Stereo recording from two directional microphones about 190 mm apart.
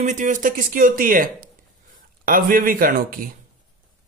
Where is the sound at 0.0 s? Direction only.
40° right (ahead or behind).